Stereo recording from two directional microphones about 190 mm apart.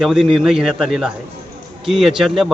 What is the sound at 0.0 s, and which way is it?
Speech, 5° right (ahead or behind).